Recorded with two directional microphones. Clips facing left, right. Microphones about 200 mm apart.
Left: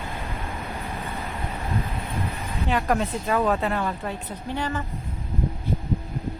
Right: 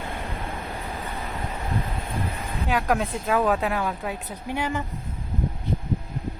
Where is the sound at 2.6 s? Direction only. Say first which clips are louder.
Even; centre (ahead or behind).